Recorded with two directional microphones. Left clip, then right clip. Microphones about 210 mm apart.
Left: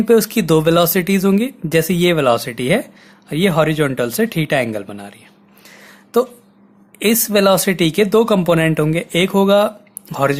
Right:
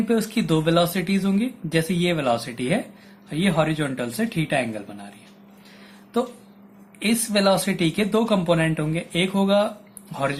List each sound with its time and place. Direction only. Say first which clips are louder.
0.1 s speech: left 11 dB; 55° left (ahead or behind)
7.0 s speech: left 7 dB; 50° left (ahead or behind)